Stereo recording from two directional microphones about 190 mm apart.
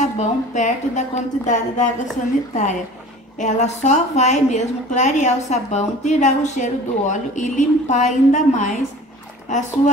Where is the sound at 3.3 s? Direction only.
40° left (ahead or behind).